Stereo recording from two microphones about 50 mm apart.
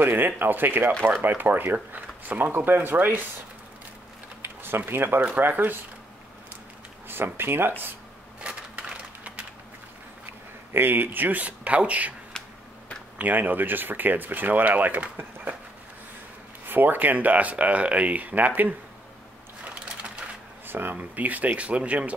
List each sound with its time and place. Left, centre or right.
0.0 s speech: right
4.4 s a sound: right
5.4 s speech: right
7.3 s speech: right
8.4 s a sound: right
10.7 s speech: right
13.2 s speech: right
16.6 s speech: right
19.6 s sewing machine: right
20.6 s a sound: right
20.9 s speech: right